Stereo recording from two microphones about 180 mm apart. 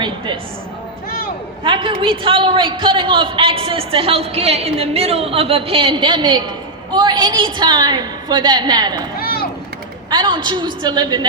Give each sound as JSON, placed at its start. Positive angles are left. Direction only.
{"t": 1.6, "sound": "a man's voice", "side_deg": -30}
{"t": 9.1, "sound": "a sound", "side_deg": 55}
{"t": 10.1, "sound": "a man's voice", "side_deg": -25}